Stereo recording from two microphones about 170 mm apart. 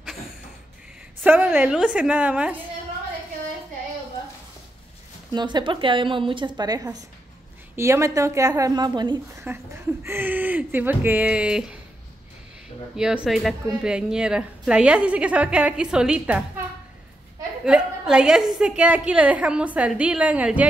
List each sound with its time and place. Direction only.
1.2 s speech: 10° right (ahead or behind)
5.3 s a woman's voice: 25° right (ahead or behind)
9.5 s speech: 10° right (ahead or behind)
12.9 s a woman's voice: 5° right (ahead or behind)
17.6 s a woman's voice: 5° right (ahead or behind)